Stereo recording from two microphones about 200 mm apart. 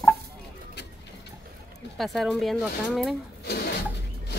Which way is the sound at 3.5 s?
50° left (ahead or behind).